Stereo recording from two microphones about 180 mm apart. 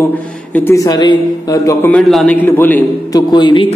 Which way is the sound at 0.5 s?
10° left (ahead or behind).